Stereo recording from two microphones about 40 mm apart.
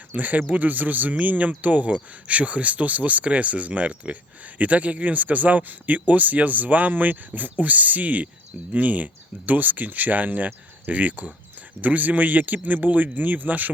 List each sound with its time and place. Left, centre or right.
0.1 s speech: right